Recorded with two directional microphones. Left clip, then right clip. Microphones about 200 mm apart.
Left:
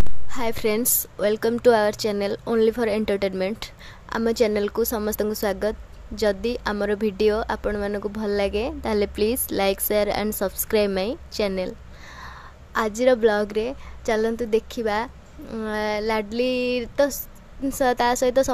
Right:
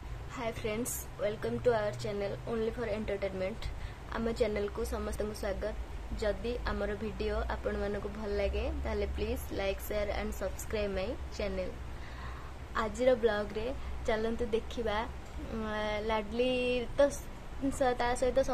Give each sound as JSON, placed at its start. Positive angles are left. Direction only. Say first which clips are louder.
{"t": 0.3, "sound": "a woman's voice", "louder": "left 12 dB", "side_deg": 40}
{"t": 12.7, "sound": "a woman's voice", "louder": "left 9 dB", "side_deg": 35}